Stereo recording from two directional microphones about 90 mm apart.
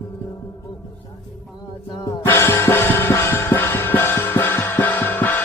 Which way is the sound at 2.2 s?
25° left (ahead or behind).